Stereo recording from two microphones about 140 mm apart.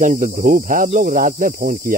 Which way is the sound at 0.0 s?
70° right (ahead or behind).